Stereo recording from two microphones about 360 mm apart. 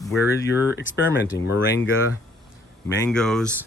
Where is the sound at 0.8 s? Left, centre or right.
Left.